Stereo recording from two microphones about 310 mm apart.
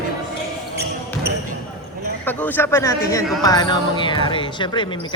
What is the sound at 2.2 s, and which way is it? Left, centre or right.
Speech, centre.